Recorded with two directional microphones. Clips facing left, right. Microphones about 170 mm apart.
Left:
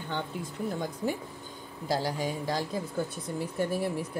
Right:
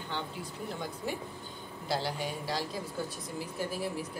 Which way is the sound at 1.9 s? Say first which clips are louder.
Left 4 dB; 45° left (ahead or behind).